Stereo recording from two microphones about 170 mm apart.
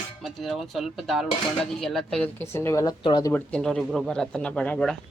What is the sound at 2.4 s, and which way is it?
Speech, 15° left (ahead or behind).